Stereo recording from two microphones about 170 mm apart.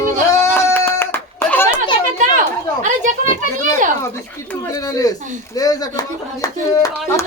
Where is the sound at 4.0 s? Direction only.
15° left (ahead or behind).